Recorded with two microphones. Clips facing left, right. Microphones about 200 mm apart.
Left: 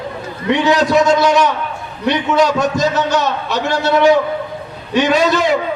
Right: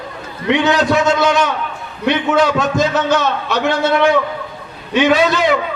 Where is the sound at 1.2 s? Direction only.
55° right (ahead or behind).